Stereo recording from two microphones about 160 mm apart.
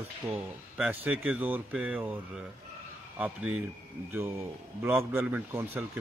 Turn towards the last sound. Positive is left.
turn(degrees=-15)  # may be behind; listen again after turning